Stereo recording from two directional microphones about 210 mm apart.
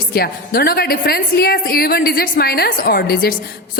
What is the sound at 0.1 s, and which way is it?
A man's voice, 45° left (ahead or behind).